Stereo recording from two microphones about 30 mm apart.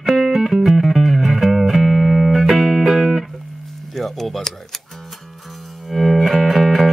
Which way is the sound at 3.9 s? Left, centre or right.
Centre.